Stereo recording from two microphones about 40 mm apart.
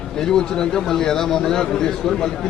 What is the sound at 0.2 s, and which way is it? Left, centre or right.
A man's voice, centre.